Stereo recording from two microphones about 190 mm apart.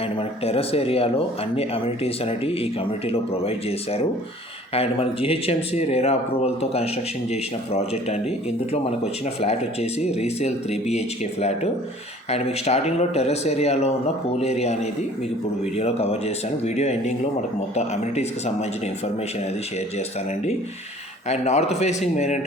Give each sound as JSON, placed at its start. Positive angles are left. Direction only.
{"t": 0.0, "sound": "speech", "side_deg": 30}